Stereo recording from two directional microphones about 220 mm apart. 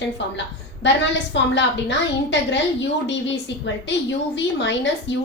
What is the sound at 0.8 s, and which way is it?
A woman's voice, 55° left (ahead or behind).